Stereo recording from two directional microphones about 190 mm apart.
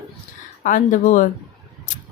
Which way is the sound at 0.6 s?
45° left (ahead or behind).